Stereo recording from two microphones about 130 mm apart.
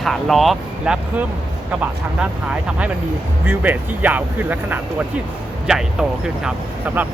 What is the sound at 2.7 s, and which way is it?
Speech, 10° right (ahead or behind).